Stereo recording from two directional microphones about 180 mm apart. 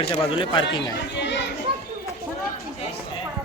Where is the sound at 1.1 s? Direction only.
75° left (ahead or behind).